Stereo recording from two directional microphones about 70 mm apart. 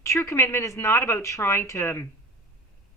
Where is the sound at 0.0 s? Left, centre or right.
Left.